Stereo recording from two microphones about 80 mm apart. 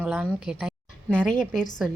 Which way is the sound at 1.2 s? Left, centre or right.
Centre.